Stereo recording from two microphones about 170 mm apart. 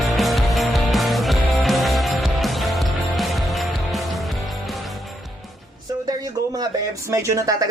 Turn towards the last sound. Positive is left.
turn(degrees=-20)  # may be behind; listen again after turning